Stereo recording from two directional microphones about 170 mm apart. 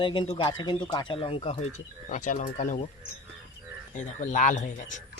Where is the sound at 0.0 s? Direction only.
30° left (ahead or behind); by 2.7 s 50° left (ahead or behind).